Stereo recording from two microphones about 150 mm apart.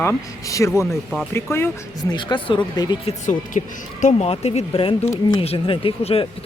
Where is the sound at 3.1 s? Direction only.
55° left (ahead or behind).